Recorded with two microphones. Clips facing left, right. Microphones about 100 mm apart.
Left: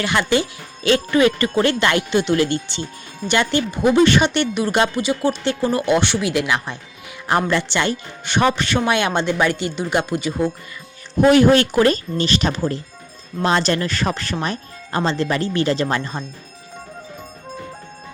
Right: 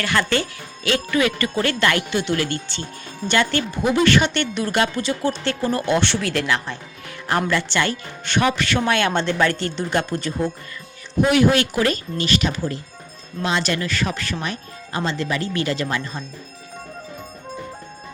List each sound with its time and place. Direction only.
0.0 s speech: 20° left (ahead or behind)
0.9 s speech: 30° left (ahead or behind); by 10.5 s 10° left (ahead or behind)
11.2 s speech: 35° left (ahead or behind)